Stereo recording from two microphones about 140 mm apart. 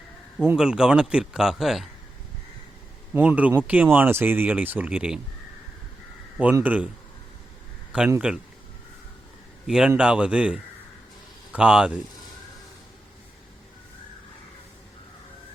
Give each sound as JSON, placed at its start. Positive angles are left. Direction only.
{"t": 0.3, "sound": "speech", "side_deg": -5}
{"t": 3.1, "sound": "speech", "side_deg": -10}
{"t": 6.3, "sound": "speech", "side_deg": -10}
{"t": 7.9, "sound": "speech", "side_deg": -10}
{"t": 9.6, "sound": "speech", "side_deg": -5}